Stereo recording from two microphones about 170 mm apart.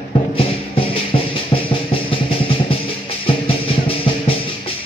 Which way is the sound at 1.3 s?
30° left (ahead or behind).